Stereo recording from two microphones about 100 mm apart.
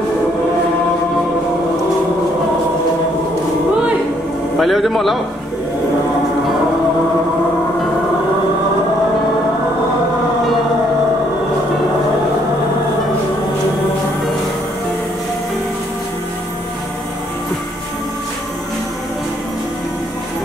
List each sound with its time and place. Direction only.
4.6 s a man's voice: centre (ahead or behind)